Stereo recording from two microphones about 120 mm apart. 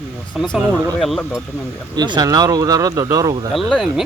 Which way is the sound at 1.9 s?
35° right (ahead or behind).